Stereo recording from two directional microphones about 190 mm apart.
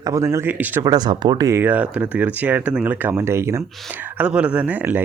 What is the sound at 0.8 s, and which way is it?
Speech, 20° right (ahead or behind).